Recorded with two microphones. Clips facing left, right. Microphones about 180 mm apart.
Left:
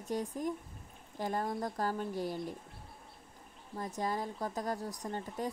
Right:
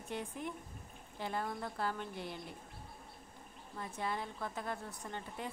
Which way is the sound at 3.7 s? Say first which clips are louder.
Left 4 dB; 40° left (ahead or behind).